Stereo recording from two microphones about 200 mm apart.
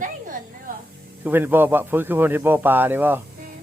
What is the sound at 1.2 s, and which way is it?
Speech, 10° right (ahead or behind).